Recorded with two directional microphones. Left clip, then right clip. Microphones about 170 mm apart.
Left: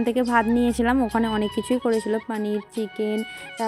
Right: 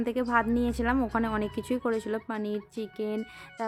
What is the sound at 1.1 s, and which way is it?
A woman's voice, 25° left (ahead or behind).